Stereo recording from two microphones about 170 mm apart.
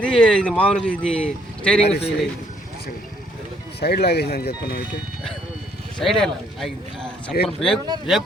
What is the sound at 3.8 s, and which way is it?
Speech, 70° left (ahead or behind).